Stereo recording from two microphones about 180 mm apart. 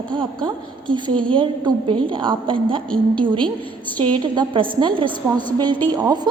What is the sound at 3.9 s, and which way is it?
A woman's voice, 25° right (ahead or behind).